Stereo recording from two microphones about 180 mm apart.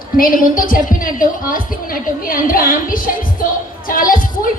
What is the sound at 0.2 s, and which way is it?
A woman's voice, 50° left (ahead or behind).